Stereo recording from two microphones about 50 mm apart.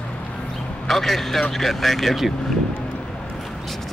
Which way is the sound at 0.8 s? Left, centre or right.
Centre.